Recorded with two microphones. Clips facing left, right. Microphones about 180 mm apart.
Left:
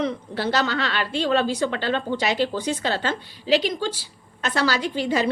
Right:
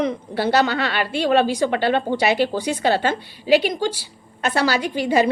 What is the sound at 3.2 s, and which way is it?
Speech, 60° right (ahead or behind).